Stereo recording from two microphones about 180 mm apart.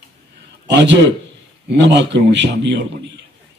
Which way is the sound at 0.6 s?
75° right (ahead or behind).